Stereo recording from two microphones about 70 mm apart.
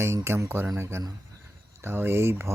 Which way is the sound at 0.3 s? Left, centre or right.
Right.